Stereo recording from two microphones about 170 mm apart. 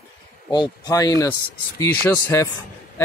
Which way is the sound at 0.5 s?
25° left (ahead or behind).